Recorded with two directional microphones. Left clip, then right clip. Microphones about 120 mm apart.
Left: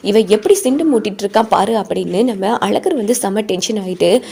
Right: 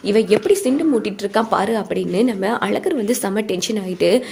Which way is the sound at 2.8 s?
30° left (ahead or behind).